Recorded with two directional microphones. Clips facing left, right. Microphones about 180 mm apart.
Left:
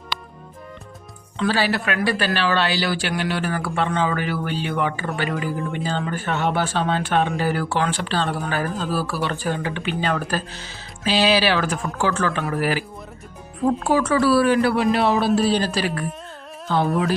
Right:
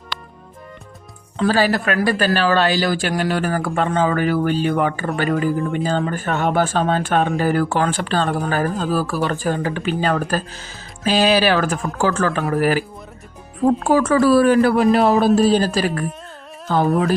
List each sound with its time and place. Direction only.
0.1 s music: 5° left (ahead or behind)
1.4 s a man's voice: 40° right (ahead or behind)